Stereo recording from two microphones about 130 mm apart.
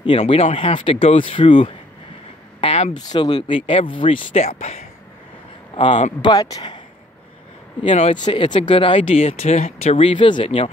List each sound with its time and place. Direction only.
0.0 s speech: 45° left (ahead or behind)
2.6 s a sound: 50° left (ahead or behind)
2.9 s speech: 35° left (ahead or behind)
4.3 s speech: 55° left (ahead or behind)
5.8 s speech: 40° left (ahead or behind)
6.2 s speech: 30° left (ahead or behind)
7.9 s speech: 65° left (ahead or behind)
8.2 s speech: 35° left (ahead or behind)